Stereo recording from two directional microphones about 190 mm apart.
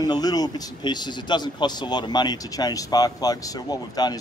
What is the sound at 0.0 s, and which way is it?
Speech, 20° left (ahead or behind).